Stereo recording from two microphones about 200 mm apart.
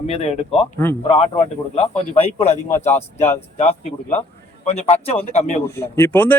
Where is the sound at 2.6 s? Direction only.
10° left (ahead or behind).